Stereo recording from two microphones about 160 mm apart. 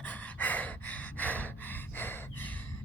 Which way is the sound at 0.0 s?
10° left (ahead or behind).